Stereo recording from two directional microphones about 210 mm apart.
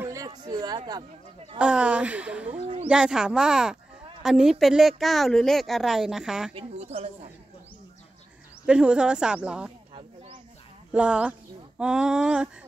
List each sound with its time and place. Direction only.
0.0 s a sound: 15° right (ahead or behind)
1.6 s a woman's voice: 5° right (ahead or behind)
2.6 s a woman's voice: 25° right (ahead or behind)
2.9 s a woman's voice: 5° right (ahead or behind)
6.5 s a woman's voice: 30° right (ahead or behind)
8.6 s a woman's voice: 5° right (ahead or behind)
10.9 s a woman's voice: 5° right (ahead or behind)